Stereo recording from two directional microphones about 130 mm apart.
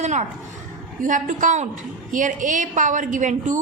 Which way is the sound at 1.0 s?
80° right.